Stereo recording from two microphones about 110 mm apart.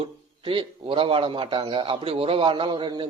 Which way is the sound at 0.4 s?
55° right (ahead or behind).